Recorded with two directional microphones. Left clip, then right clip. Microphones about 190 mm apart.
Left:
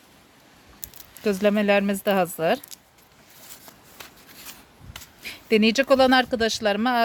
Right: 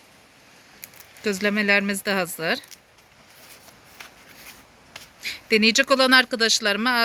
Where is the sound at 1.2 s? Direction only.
40° left (ahead or behind).